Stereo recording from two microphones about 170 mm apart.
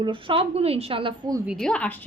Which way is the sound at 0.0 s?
30° right (ahead or behind).